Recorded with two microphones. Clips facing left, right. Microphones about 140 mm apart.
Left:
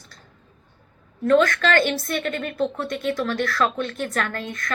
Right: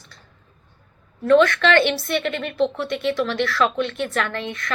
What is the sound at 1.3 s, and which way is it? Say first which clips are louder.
A woman's voice: right 3 dB; 45° left (ahead or behind).